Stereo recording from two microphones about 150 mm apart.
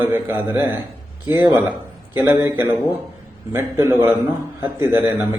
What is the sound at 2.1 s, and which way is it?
A man's voice, 15° right (ahead or behind).